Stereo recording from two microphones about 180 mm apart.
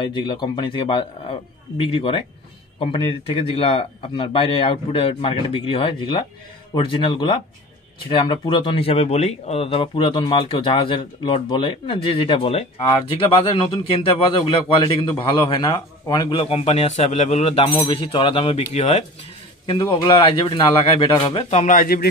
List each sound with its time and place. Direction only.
0.0 s a man's voice: 25° left (ahead or behind); by 22.0 s 50° left (ahead or behind)